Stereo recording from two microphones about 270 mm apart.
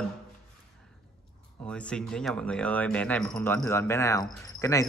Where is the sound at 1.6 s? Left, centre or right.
Centre.